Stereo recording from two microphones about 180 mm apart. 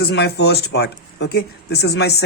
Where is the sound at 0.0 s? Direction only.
65° left (ahead or behind).